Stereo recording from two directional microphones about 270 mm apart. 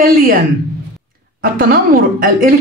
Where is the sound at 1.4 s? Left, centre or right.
Right.